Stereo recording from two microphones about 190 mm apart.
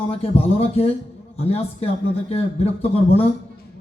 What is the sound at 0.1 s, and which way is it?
A man's voice, 30° left (ahead or behind).